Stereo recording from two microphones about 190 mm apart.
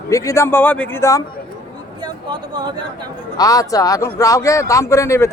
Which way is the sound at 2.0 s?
25° right (ahead or behind).